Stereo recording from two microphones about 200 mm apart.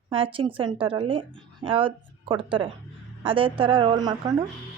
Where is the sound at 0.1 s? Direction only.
25° right (ahead or behind).